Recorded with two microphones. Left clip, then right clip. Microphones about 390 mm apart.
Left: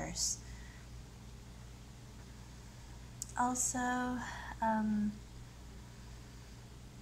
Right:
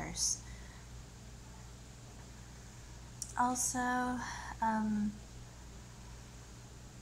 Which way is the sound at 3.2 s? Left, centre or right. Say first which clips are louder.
Right 2 dB; centre.